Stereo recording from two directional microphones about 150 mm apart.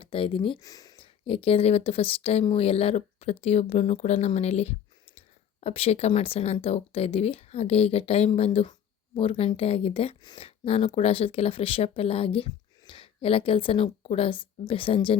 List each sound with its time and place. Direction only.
0.0 s speech: 35° left (ahead or behind)
0.6 s a sound: 25° left (ahead or behind)
1.3 s a woman's voice: 40° left (ahead or behind)